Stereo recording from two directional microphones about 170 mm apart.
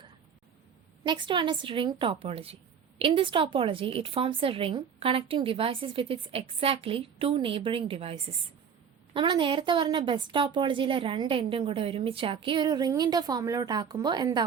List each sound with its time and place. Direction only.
1.0 s a woman's voice: 30° right (ahead or behind)